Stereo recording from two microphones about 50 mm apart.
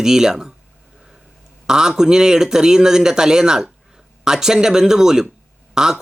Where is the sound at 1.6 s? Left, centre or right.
Centre.